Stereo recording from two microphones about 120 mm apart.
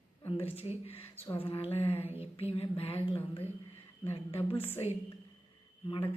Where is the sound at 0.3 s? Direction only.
50° left (ahead or behind).